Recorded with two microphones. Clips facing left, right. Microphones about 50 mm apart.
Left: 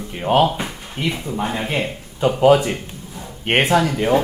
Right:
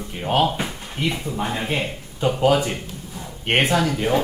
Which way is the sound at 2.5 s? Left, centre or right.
Left.